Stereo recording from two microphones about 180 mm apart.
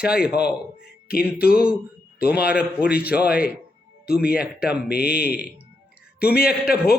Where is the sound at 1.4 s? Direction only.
55° left (ahead or behind).